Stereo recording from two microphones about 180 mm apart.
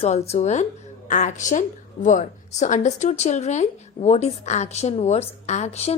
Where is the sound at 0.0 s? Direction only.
35° left (ahead or behind).